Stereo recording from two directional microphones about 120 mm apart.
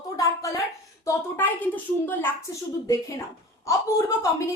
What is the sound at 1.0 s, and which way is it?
A woman's voice, 15° left (ahead or behind).